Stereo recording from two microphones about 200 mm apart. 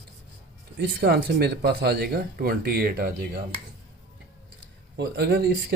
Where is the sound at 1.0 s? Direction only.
55° right (ahead or behind).